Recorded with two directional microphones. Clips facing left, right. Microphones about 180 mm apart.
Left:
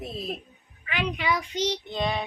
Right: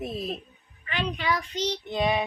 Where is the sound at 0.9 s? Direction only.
10° left (ahead or behind).